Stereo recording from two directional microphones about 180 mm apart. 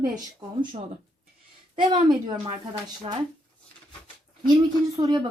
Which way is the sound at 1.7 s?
25° right (ahead or behind).